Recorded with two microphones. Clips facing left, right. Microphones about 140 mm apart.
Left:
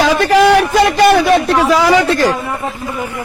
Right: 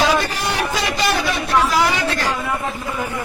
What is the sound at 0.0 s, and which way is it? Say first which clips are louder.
A man's voice: left 9 dB; 90° left.